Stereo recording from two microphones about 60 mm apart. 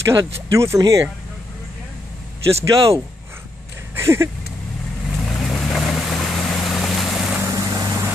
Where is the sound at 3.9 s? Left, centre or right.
Right.